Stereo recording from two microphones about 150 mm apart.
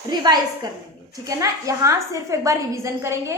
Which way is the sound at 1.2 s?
20° right (ahead or behind).